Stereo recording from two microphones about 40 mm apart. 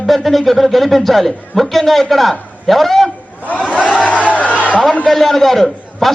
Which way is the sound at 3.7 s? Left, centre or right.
Left.